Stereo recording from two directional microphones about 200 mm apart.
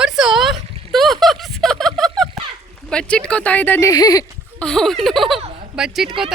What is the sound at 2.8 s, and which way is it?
Speech, 5° left (ahead or behind).